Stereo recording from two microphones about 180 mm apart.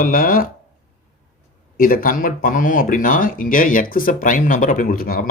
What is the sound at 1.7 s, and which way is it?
Speech, 55° left (ahead or behind).